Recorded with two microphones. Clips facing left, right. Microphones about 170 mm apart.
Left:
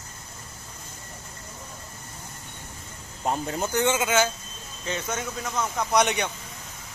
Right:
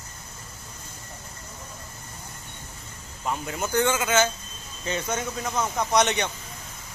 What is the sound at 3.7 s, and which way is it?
Speech, 20° left (ahead or behind).